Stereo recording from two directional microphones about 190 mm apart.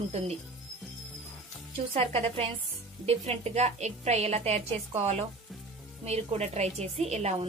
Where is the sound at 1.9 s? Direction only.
30° right (ahead or behind).